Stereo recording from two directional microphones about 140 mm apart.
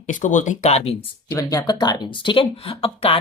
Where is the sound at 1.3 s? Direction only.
20° left (ahead or behind); by 3.2 s 40° left (ahead or behind).